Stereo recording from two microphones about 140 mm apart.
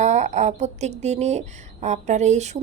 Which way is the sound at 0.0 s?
55° right (ahead or behind).